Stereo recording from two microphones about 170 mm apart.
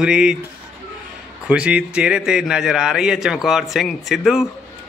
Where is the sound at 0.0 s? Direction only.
5° right (ahead or behind).